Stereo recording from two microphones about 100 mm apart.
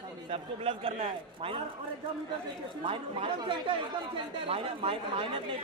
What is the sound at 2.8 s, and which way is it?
Speech, 65° right (ahead or behind).